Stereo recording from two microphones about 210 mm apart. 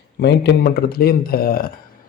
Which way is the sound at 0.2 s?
55° left (ahead or behind).